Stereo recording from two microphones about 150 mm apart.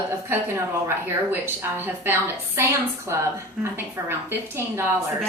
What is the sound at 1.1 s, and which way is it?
A woman's voice, 15° right (ahead or behind).